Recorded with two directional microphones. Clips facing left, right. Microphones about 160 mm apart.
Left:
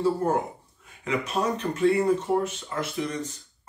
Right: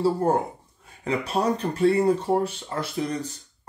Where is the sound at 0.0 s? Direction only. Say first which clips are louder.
Right 2 dB; 30° right (ahead or behind).